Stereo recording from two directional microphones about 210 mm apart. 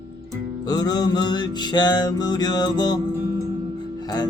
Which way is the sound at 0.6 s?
20° left (ahead or behind).